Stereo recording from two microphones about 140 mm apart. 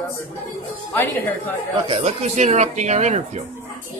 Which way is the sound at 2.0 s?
55° right (ahead or behind).